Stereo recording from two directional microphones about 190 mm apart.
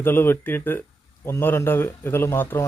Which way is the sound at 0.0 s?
10° left (ahead or behind).